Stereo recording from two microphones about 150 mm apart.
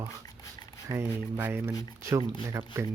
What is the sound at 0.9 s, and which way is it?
Speech, 15° right (ahead or behind).